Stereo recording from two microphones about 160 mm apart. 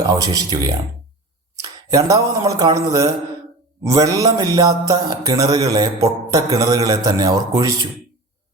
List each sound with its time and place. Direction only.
0.0 s music: 25° right (ahead or behind)
1.5 s speech: 20° right (ahead or behind)
3.8 s music: 20° right (ahead or behind)